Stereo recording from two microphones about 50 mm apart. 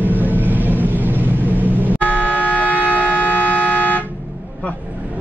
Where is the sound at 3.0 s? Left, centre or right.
Left.